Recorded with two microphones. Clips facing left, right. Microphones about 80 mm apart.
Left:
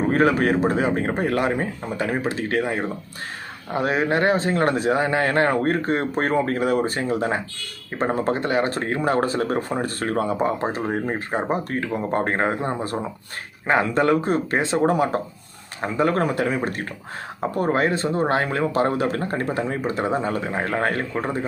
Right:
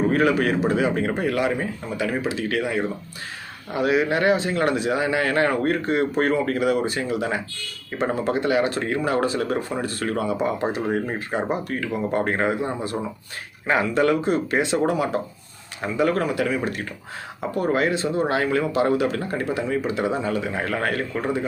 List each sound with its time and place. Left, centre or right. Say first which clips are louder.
0.1 s speech: left 1 dB; left